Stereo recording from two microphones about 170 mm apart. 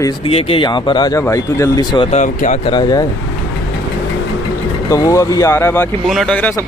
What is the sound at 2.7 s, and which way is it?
Speech, 25° left (ahead or behind).